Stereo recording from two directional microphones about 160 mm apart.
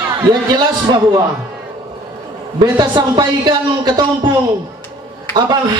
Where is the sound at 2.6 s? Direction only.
25° right (ahead or behind).